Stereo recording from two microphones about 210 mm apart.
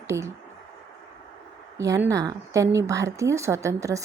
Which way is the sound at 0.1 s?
15° right (ahead or behind).